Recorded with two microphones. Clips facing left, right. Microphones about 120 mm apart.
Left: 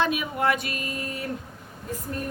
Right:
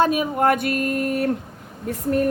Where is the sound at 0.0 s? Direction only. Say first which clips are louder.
Right 6 dB; 40° right (ahead or behind); by 1.3 s 60° right (ahead or behind).